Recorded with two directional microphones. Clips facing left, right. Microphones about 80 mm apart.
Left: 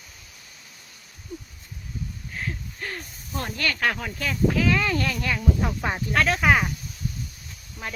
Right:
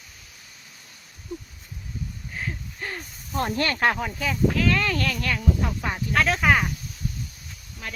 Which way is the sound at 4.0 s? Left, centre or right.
Centre.